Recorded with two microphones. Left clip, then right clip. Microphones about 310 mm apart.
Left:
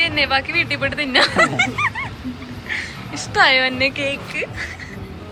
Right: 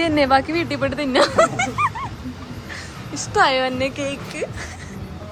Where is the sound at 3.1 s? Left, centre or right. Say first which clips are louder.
Left 3 dB; centre.